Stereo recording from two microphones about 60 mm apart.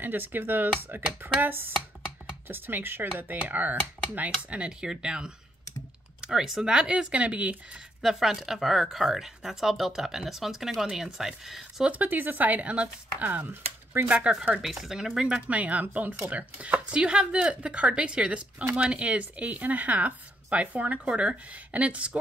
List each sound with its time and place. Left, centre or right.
0.0 s speech: right
8.0 s speech: centre
11.8 s speech: right
12.7 s speech: centre
13.3 s speech: right
14.6 s speech: centre
15.4 s speech: right